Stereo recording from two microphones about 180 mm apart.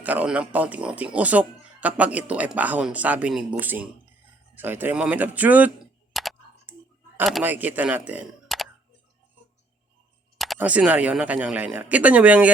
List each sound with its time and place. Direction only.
0.0 s speech: 10° right (ahead or behind)
4.5 s a sound: 10° right (ahead or behind)
7.4 s speech: 10° right (ahead or behind)
10.3 s speech: centre (ahead or behind)